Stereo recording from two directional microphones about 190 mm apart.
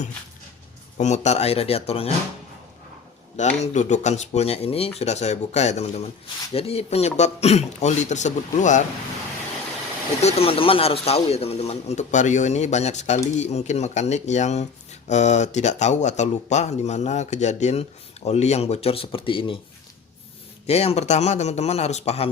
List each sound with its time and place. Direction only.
0.9 s speech: 35° left (ahead or behind)
3.3 s speech: 40° left (ahead or behind)
10.2 s speech: 30° left (ahead or behind)
20.7 s speech: 35° left (ahead or behind)